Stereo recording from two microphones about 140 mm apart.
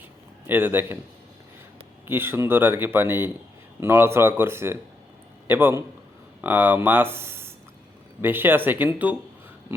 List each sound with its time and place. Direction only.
0.4 s speech: 15° right (ahead or behind)
2.0 s speech: 15° right (ahead or behind)